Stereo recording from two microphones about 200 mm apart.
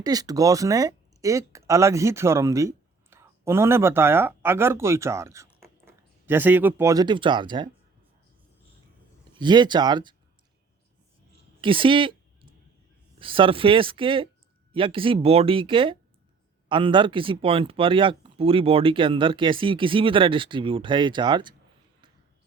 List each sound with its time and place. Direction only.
0.0 s speech: 20° right (ahead or behind)
9.3 s speech: 20° right (ahead or behind)
11.6 s a sound: 25° right (ahead or behind)
13.1 s speech: 25° right (ahead or behind)